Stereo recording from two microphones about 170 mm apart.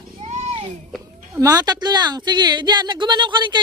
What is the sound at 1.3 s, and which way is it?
Speech, 20° right (ahead or behind).